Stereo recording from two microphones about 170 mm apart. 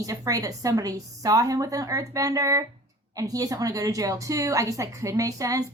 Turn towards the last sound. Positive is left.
turn(degrees=-20)  # may be behind; listen again after turning